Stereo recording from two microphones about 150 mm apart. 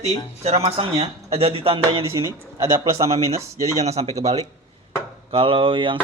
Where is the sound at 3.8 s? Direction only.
45° right (ahead or behind).